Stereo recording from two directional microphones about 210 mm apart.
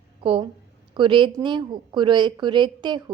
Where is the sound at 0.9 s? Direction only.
25° right (ahead or behind).